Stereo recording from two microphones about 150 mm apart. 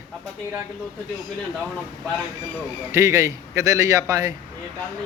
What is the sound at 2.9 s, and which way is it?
A man's voice, 20° right (ahead or behind).